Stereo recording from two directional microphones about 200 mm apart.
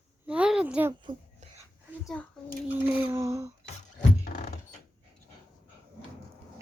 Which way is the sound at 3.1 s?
15° right (ahead or behind).